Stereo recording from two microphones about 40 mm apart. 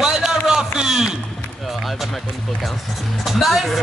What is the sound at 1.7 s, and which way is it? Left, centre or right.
Music, centre.